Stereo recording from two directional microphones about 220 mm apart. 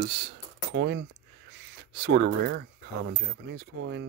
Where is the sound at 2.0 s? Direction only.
50° right (ahead or behind).